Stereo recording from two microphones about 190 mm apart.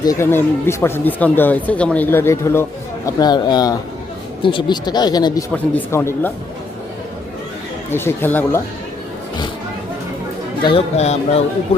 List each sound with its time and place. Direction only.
0.0 s speech: 15° left (ahead or behind)
7.9 s speech: 10° left (ahead or behind)
10.6 s speech: 30° left (ahead or behind)